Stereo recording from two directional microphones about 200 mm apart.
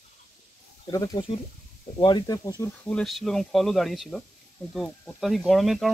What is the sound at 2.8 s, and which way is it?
Speech, 5° left (ahead or behind).